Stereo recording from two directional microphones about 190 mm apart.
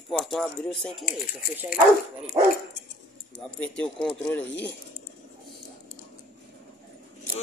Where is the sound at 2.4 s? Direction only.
25° right (ahead or behind).